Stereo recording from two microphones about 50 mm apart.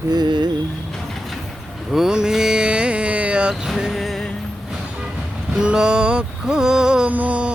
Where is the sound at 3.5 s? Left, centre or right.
Centre.